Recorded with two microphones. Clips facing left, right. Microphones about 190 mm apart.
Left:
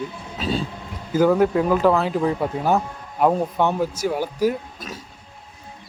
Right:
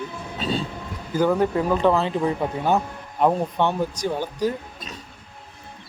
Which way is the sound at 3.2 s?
5° left (ahead or behind).